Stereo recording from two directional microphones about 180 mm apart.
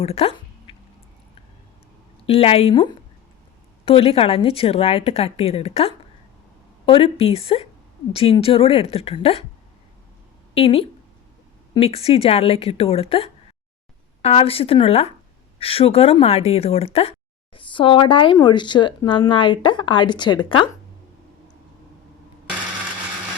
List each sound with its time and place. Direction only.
0.0 s a sound: 35° left (ahead or behind)
2.2 s a woman's voice: 30° left (ahead or behind)
10.5 s a woman's voice: 30° left (ahead or behind)